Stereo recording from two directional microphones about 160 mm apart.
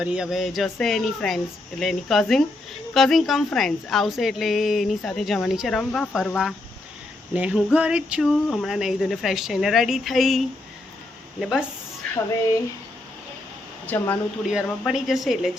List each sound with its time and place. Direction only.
0.0 s a woman's voice: 5° right (ahead or behind)
13.8 s a woman's voice: 10° left (ahead or behind)
14.4 s a woman's voice: 5° right (ahead or behind)